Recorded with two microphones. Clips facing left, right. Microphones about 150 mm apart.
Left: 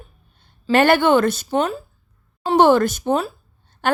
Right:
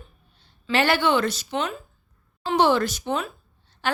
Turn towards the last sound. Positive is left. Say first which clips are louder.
# left 6 dB
turn(degrees=55)  # may be behind; listen again after turning